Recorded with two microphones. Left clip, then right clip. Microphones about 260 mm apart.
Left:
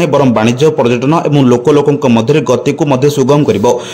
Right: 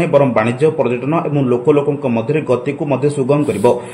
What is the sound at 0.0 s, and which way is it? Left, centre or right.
A man's voice, left.